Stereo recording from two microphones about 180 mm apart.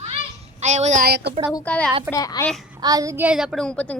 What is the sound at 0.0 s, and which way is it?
Children playing, 35° right (ahead or behind).